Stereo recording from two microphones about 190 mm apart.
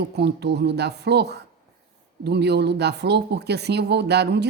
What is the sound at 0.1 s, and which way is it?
A woman's voice, 60° right (ahead or behind).